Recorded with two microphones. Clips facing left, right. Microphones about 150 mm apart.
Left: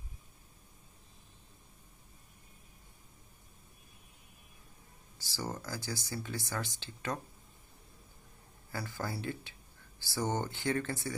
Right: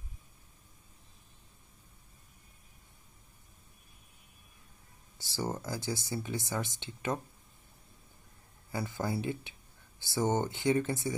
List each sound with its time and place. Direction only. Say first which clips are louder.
5.2 s speech: right 4 dB; 25° right (ahead or behind)
8.7 s speech: right 5 dB; 20° right (ahead or behind)